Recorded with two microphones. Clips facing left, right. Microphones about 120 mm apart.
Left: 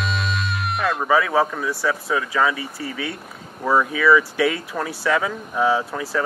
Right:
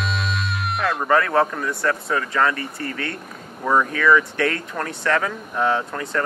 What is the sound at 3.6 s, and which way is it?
Speech, 5° left (ahead or behind).